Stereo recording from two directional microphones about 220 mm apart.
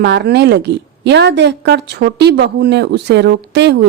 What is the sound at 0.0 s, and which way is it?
A woman's voice, 50° right (ahead or behind).